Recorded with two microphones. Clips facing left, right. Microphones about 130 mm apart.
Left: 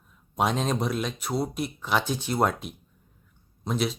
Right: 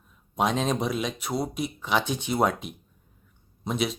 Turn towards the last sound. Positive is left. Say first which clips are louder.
# even
turn(degrees=0)  # may be behind; listen again after turning